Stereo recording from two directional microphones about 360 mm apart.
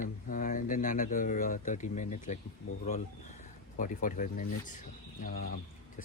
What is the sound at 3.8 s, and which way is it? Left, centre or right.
Speech, left.